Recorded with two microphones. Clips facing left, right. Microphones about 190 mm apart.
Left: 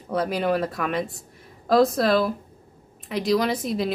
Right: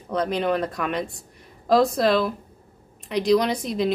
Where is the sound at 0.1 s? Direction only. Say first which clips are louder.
Even; 5° left (ahead or behind).